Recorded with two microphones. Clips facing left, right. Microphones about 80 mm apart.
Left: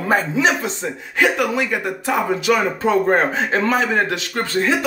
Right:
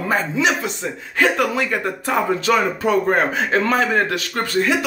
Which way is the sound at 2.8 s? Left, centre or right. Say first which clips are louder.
Left 1 dB; left.